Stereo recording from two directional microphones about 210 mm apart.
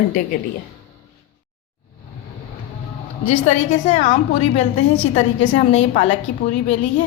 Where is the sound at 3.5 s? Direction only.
35° left (ahead or behind).